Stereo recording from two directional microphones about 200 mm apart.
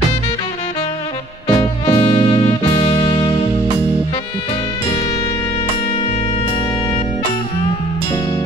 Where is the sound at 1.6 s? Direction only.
25° left (ahead or behind).